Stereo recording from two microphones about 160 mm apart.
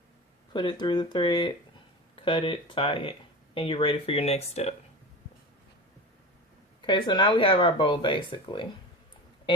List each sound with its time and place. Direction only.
0.5 s speech: 30° left (ahead or behind)
6.8 s speech: 30° left (ahead or behind)